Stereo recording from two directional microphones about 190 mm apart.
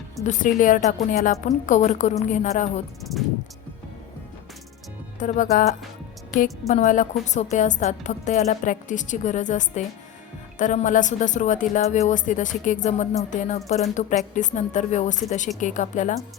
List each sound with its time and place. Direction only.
0.3 s a woman's voice: 45° left (ahead or behind)
3.0 s speech: centre (ahead or behind)
5.2 s a woman's voice: 40° left (ahead or behind)